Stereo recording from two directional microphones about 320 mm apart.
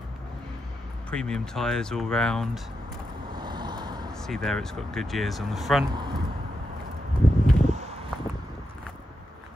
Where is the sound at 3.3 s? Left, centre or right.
Centre.